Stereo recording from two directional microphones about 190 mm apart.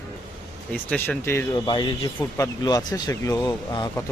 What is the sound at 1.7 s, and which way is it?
Speech, 25° left (ahead or behind).